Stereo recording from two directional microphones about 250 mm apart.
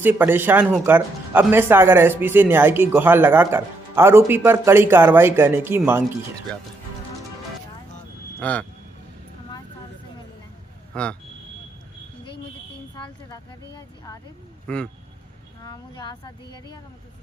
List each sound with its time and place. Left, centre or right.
0.0 s speech: centre
8.4 s speech: centre
10.9 s speech: centre
13.0 s a sound: centre
14.7 s speech: centre
15.6 s speech: centre